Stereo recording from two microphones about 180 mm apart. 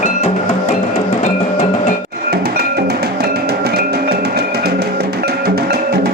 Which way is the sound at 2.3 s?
60° right (ahead or behind).